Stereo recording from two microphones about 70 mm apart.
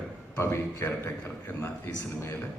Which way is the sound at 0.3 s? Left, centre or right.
Left.